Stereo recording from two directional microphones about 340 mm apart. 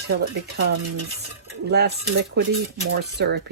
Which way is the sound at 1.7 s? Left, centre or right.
Right.